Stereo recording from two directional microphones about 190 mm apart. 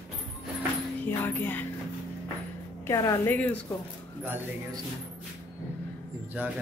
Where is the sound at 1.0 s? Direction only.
10° left (ahead or behind).